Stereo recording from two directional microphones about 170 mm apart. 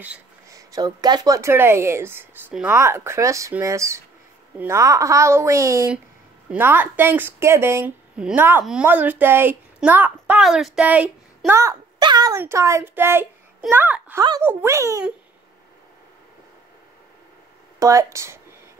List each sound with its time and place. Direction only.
0.5 s a woman's voice: 20° right (ahead or behind)
17.7 s speech: 20° right (ahead or behind)